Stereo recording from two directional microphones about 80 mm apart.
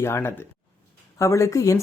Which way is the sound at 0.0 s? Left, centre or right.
Left.